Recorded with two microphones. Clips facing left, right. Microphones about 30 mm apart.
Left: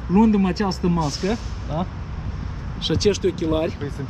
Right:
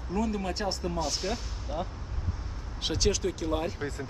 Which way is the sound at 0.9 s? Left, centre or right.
Centre.